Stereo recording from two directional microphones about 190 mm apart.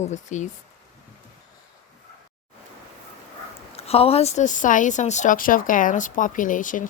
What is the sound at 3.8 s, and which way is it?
A woman's voice, 30° left (ahead or behind).